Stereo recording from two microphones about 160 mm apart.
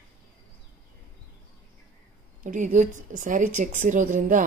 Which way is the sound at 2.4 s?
55° right (ahead or behind).